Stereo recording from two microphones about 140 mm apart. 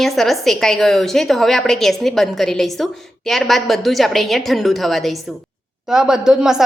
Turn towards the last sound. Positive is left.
turn(degrees=-5)  # may be behind; listen again after turning